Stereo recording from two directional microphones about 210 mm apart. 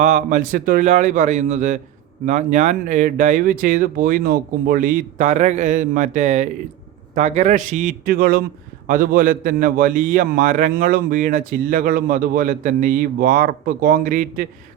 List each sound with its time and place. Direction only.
0.0 s a man's voice: 35° right (ahead or behind)